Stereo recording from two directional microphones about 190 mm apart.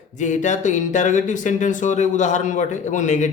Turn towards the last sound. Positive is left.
turn(degrees=40)  # may be behind; listen again after turning